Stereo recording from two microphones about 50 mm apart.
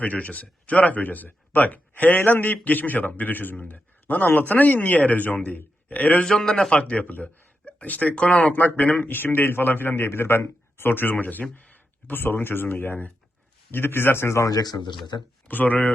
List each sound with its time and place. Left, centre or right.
0.0 s a man's voice: left
6.2 s a man's voice: centre; by 14.5 s left
15.4 s a man's voice: left